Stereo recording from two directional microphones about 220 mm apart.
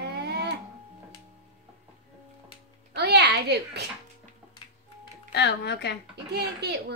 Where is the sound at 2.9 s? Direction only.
50° right (ahead or behind).